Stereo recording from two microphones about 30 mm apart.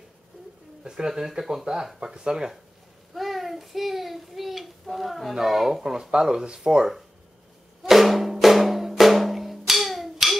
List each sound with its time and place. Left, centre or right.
0.8 s speech: centre
1.7 s speech: right
2.0 s speech: centre
3.2 s a sound: centre
5.4 s speech: centre; by 6.9 s right
7.9 s drum: centre